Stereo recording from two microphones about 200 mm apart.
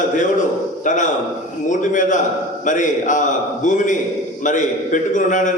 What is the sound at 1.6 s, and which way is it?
A man's voice, 40° left (ahead or behind).